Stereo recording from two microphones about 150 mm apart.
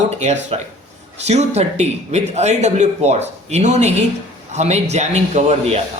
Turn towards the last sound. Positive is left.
turn(degrees=-50)  # may be behind; listen again after turning